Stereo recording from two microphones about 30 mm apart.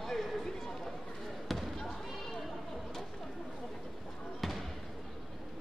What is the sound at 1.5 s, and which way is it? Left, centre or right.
Basketball bounce, centre.